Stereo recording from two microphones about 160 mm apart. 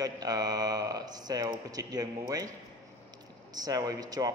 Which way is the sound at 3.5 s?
25° right (ahead or behind).